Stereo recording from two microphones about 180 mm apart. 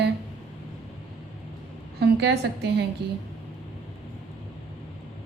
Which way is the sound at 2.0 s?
70° right (ahead or behind).